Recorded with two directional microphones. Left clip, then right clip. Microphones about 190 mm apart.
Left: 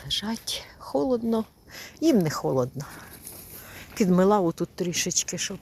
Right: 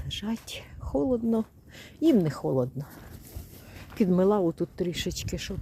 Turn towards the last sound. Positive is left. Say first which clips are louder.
# left 6 dB
turn(degrees=-20)  # may be behind; listen again after turning